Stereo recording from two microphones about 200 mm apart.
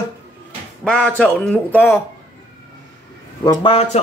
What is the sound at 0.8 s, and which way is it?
A man's voice, 5° left (ahead or behind).